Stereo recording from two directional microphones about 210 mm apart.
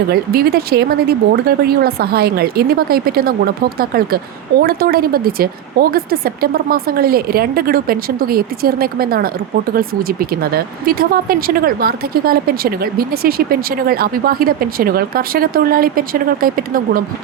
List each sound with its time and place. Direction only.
0.1 s speech: 45° right (ahead or behind)